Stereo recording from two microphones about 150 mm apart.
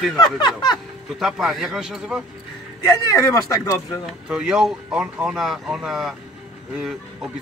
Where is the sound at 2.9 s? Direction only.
25° left (ahead or behind).